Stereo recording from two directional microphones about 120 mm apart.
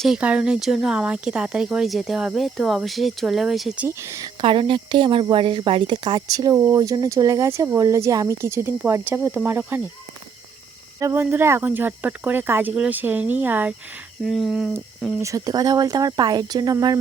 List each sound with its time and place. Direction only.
0.2 s speech: 10° right (ahead or behind)
3.8 s speech: 20° right (ahead or behind)
4.4 s speech: 45° right (ahead or behind); by 9.8 s 15° right (ahead or behind)
11.0 s cricket: 20° right (ahead or behind)
14.3 s speech: centre (ahead or behind)
15.2 s speech: 30° right (ahead or behind)